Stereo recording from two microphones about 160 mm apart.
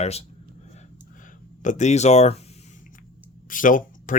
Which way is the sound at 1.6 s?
45° left (ahead or behind).